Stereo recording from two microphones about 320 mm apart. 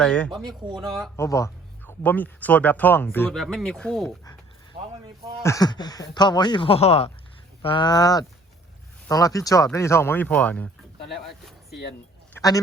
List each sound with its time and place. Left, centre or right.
0.0 s speech: centre
4.7 s vehicle: centre
5.4 s speech: centre
12.3 s a sound: centre